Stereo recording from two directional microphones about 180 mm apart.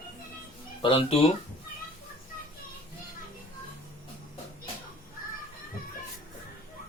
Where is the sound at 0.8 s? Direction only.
30° left (ahead or behind).